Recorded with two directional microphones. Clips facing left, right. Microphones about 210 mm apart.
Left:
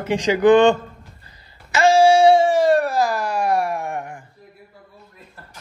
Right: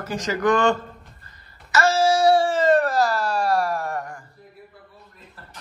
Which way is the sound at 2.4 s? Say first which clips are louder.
Left 2 dB; 10° left (ahead or behind).